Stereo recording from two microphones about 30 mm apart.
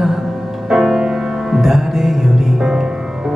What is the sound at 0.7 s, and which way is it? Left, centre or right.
Music, centre.